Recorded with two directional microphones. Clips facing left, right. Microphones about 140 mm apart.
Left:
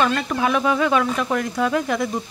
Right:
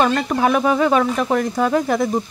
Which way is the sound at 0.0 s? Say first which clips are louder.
Right 3 dB; 45° right (ahead or behind).